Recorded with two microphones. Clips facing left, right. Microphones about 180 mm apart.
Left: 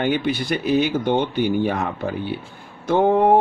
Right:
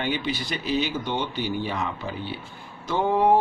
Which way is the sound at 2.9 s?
55° left (ahead or behind).